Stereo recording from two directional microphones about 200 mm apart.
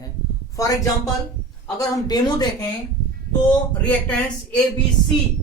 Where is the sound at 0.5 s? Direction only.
15° left (ahead or behind).